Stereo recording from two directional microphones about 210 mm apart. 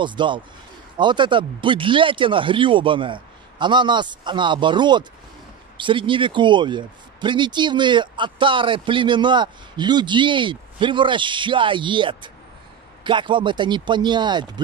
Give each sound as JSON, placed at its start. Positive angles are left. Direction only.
{"t": 0.0, "sound": "speech", "side_deg": -20}